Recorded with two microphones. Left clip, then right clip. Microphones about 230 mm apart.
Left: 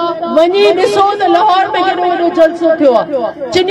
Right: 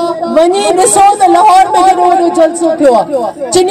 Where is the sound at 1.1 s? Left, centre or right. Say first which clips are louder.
Right 4 dB; right.